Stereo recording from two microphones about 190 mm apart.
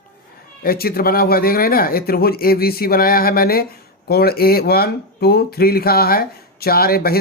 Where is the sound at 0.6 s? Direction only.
50° left (ahead or behind).